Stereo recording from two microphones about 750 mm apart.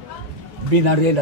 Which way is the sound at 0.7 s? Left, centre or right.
Right.